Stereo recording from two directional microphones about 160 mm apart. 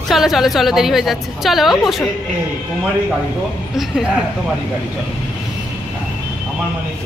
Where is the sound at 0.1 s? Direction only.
Centre (ahead or behind).